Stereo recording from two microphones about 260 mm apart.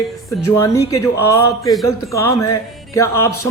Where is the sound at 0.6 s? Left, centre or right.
Centre.